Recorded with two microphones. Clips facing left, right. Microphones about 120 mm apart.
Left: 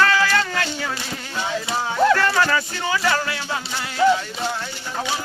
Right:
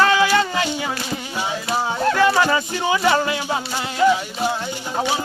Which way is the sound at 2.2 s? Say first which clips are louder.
Right 3 dB; 15° right (ahead or behind).